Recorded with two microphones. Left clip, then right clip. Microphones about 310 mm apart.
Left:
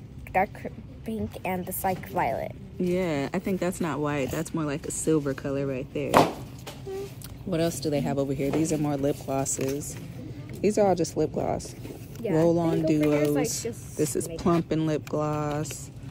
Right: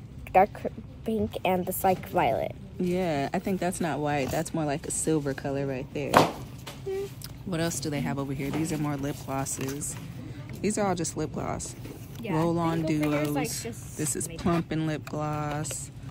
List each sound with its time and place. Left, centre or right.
0.7 s a woman's voice: right
2.8 s speech: centre
7.4 s speech: centre